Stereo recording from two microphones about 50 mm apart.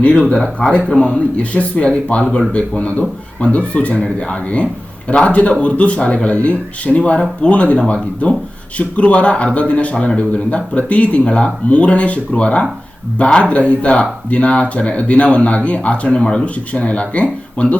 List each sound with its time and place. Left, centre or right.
0.2 s a man's voice: centre
1.4 s speech: left